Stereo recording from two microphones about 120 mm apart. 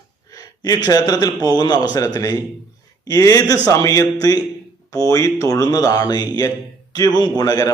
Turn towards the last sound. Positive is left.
turn(degrees=30)  # may be behind; listen again after turning